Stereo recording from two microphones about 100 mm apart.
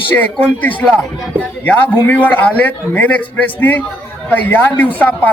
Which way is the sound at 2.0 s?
15° left (ahead or behind).